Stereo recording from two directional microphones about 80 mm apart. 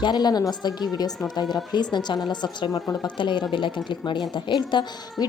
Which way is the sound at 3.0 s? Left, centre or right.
Left.